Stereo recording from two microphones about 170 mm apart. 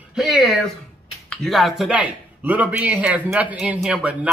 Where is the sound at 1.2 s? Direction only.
Centre (ahead or behind).